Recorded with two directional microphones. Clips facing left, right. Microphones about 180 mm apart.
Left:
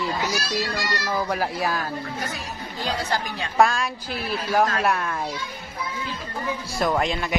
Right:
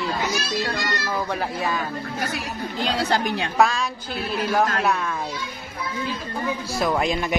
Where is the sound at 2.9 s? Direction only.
70° right (ahead or behind).